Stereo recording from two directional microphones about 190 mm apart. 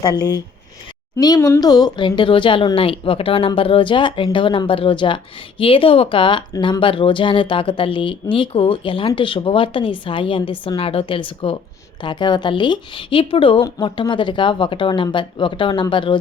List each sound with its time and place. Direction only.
0.0 s speech: 20° left (ahead or behind)